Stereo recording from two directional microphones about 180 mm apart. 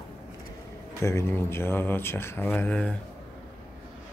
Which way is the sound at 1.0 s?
15° left (ahead or behind).